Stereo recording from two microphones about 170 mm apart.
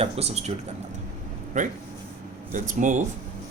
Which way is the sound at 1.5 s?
50° right (ahead or behind).